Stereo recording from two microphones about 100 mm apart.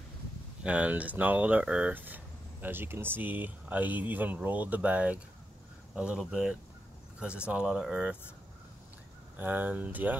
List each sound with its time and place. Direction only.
0.7 s speech: 15° right (ahead or behind)
9.4 s speech: 15° right (ahead or behind)